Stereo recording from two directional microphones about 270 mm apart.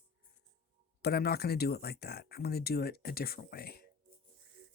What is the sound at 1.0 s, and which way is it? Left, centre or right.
Speech, left.